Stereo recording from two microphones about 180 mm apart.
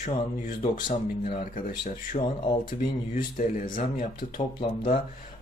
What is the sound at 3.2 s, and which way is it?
Speech, 45° left (ahead or behind).